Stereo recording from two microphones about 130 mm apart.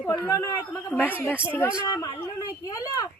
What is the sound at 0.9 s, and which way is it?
Speech, 15° left (ahead or behind).